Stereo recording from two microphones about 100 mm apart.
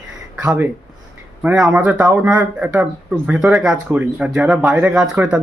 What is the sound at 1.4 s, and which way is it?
Speech, 10° right (ahead or behind).